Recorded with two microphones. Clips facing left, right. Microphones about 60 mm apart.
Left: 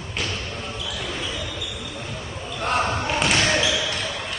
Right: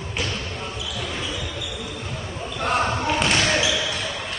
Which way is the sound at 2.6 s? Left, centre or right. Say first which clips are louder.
Right 1 dB; centre.